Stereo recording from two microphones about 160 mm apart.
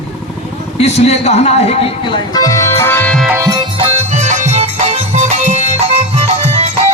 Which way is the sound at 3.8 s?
45° right (ahead or behind).